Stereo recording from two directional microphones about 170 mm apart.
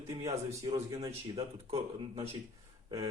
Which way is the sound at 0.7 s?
20° right (ahead or behind).